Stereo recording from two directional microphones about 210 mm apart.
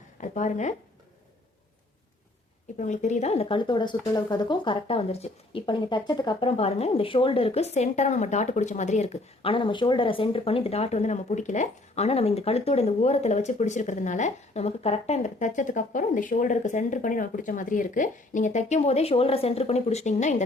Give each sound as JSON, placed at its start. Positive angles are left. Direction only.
{"t": 0.2, "sound": "speech", "side_deg": 35}
{"t": 2.7, "sound": "speech", "side_deg": 35}